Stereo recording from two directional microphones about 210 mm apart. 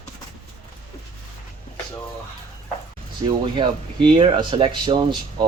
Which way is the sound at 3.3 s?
25° right (ahead or behind).